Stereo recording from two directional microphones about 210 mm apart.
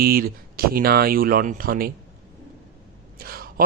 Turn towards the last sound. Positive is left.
turn(degrees=-45)  # may be behind; listen again after turning